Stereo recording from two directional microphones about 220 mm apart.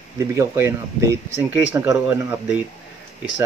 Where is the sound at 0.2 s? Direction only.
15° right (ahead or behind).